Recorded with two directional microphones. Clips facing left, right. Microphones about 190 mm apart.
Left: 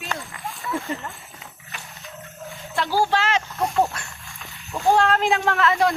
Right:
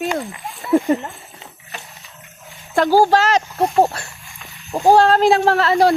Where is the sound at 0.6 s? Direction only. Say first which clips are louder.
Right 13 dB; 30° right (ahead or behind).